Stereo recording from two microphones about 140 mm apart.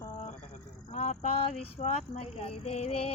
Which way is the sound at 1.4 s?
50° left (ahead or behind).